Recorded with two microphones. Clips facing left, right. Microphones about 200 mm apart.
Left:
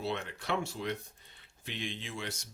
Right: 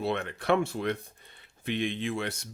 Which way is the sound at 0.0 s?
60° right (ahead or behind).